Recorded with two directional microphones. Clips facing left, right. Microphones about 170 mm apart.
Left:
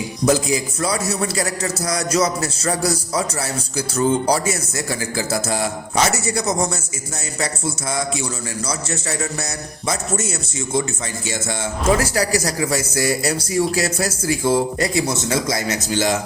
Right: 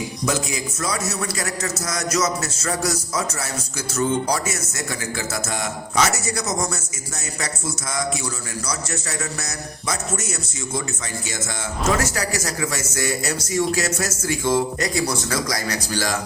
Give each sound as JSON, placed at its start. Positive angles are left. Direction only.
{"t": 0.3, "sound": "a man's voice", "side_deg": 35}
{"t": 8.6, "sound": "a man's voice", "side_deg": 30}
{"t": 11.9, "sound": "a man's voice", "side_deg": 35}